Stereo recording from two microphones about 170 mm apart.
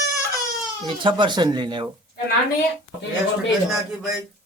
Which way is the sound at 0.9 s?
30° right (ahead or behind).